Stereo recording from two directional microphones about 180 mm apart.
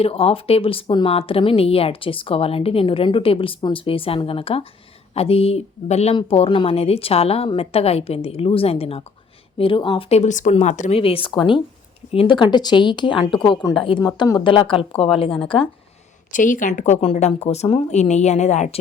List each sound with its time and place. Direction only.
0.0 s speech: 30° left (ahead or behind)
16.3 s speech: 45° left (ahead or behind)